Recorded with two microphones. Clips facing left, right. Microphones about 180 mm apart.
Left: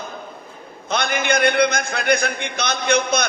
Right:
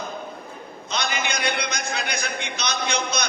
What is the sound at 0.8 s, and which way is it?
A man's voice, 55° left (ahead or behind).